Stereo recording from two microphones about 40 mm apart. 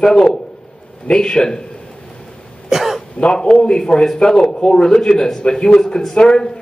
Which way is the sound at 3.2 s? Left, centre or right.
Left.